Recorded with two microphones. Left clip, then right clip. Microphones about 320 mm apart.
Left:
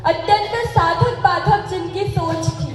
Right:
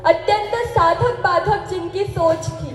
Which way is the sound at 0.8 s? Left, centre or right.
Right.